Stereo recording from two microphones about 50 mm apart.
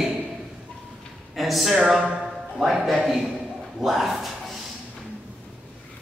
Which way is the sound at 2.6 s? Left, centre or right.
Centre.